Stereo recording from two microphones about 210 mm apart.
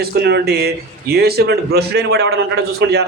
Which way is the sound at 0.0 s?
50° right (ahead or behind).